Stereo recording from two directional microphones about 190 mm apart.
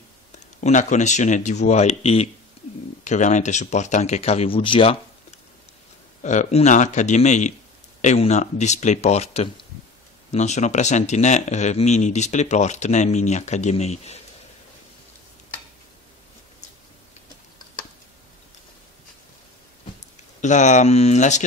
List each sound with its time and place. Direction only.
0.6 s speech: 40° left (ahead or behind)
6.2 s speech: 40° left (ahead or behind)
20.3 s speech: 40° left (ahead or behind)